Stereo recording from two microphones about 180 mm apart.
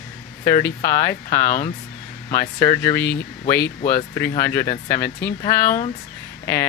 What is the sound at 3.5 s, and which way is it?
Speech, 60° left (ahead or behind).